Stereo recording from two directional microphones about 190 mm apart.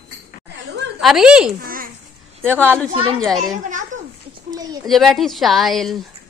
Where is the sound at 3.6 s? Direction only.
40° right (ahead or behind).